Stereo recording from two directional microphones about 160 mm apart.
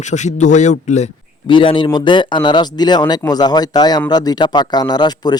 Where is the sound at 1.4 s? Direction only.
30° left (ahead or behind).